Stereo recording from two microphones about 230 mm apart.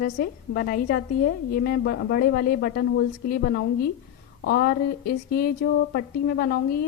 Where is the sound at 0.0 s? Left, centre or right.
Left.